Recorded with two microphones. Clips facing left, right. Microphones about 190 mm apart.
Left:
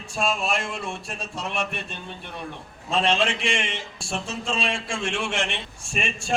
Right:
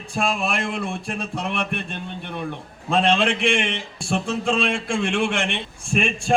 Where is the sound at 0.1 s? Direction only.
55° right (ahead or behind).